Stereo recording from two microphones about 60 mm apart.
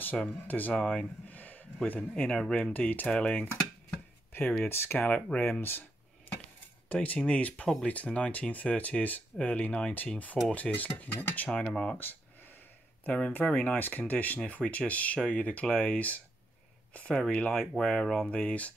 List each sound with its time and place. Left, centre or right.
0.5 s speech: left
0.7 s speech: centre
1.3 s a sound: left
1.9 s speech: left
3.1 s speech: centre
4.3 s speech: left
4.9 s speech: left
5.4 s a sound: left
6.9 s speech: left
11.7 s speech: centre
12.0 s a sound: left
13.0 s speech: centre
17.3 s speech: left
18.3 s speech: left